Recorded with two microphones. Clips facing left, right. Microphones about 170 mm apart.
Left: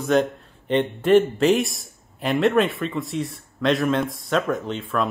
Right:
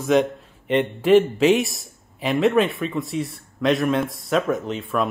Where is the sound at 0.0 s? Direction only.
Centre (ahead or behind).